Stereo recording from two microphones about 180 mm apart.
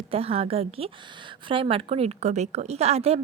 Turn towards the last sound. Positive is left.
turn(degrees=-35)  # may be behind; listen again after turning